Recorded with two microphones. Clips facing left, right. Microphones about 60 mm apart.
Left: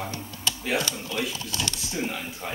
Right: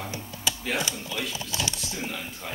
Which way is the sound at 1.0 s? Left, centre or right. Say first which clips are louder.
Left 2 dB; centre.